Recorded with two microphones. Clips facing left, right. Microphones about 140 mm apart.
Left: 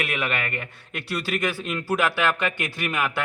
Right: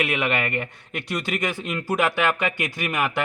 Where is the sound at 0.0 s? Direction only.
20° right (ahead or behind).